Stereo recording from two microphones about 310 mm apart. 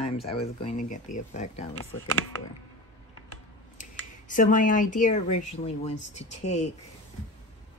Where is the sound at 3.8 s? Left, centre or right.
Left.